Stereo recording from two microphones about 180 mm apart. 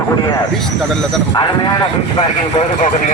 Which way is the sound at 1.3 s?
25° left (ahead or behind).